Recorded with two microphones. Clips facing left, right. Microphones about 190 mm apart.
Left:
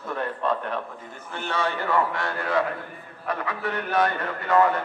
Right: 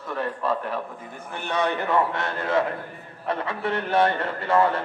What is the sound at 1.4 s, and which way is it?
A man's voice, 15° right (ahead or behind).